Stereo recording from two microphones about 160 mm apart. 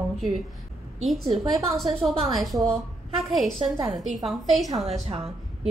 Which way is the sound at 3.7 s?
25° right (ahead or behind).